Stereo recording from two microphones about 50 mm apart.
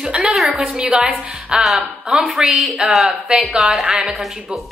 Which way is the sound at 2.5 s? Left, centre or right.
Right.